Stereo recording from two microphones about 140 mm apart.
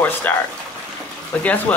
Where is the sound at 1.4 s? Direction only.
10° left (ahead or behind).